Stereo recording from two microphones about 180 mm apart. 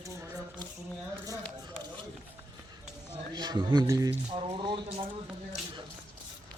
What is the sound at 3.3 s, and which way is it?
Speech, 25° right (ahead or behind).